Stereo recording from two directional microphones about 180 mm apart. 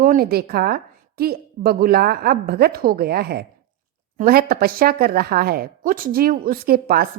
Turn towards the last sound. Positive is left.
turn(degrees=-55)  # may be behind; listen again after turning